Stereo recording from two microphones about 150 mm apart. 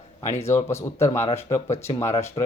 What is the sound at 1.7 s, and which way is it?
Speech, 45° left (ahead or behind).